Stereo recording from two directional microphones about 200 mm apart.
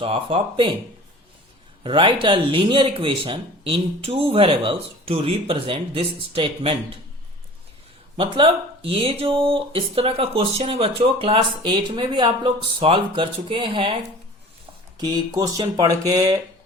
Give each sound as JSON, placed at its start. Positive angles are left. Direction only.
{"t": 0.0, "sound": "speech", "side_deg": -25}
{"t": 1.8, "sound": "speech", "side_deg": -25}
{"t": 8.1, "sound": "speech", "side_deg": -30}
{"t": 14.9, "sound": "speech", "side_deg": -20}